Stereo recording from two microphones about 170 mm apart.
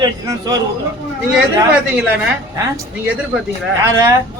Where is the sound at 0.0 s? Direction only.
20° right (ahead or behind).